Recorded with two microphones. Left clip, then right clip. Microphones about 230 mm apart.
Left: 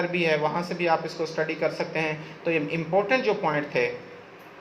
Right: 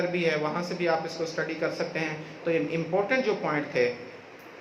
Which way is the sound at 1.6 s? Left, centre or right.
Centre.